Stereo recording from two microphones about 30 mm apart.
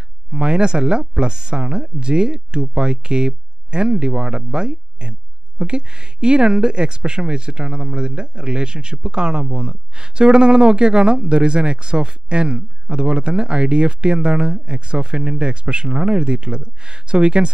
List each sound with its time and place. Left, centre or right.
0.3 s speech: right